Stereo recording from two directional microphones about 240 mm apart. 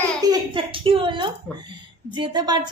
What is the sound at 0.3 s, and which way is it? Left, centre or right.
A woman's voice, right.